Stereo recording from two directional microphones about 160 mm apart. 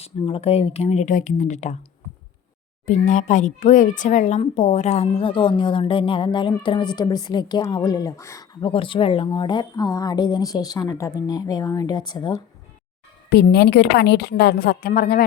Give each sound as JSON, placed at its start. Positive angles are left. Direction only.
{"t": 0.0, "sound": "speech", "side_deg": 40}
{"t": 2.8, "sound": "a woman's voice", "side_deg": 50}
{"t": 8.6, "sound": "speech", "side_deg": 35}
{"t": 13.3, "sound": "a woman's voice", "side_deg": 90}